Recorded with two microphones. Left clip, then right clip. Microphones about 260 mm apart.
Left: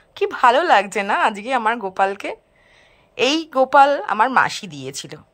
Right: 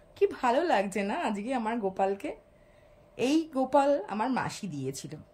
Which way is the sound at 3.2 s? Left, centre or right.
Centre.